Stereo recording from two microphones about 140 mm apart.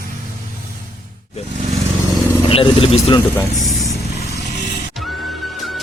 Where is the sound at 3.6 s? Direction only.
Centre (ahead or behind).